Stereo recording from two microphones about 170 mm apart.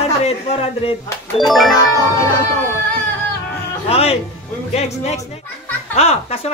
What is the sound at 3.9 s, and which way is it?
Speech, 35° left (ahead or behind).